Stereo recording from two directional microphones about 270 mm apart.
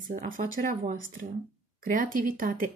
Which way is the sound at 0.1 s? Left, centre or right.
Right.